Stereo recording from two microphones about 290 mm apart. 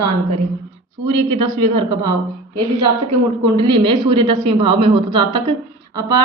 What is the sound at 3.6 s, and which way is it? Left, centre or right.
A woman's voice, centre.